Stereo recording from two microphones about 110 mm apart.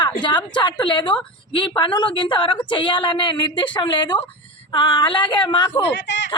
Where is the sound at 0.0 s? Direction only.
45° left (ahead or behind).